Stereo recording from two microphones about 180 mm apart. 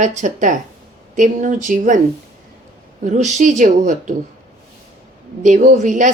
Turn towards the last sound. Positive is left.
turn(degrees=-45)  # may be behind; listen again after turning